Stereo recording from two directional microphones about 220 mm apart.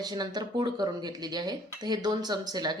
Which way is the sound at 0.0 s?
20° right (ahead or behind).